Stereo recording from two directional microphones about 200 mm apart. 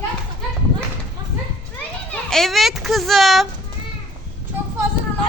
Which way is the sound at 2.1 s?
Centre (ahead or behind).